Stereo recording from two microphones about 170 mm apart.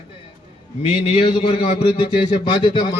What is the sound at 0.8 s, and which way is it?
A man's voice, 35° left (ahead or behind).